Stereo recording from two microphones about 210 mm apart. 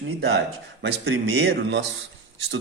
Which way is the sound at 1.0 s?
70° right (ahead or behind).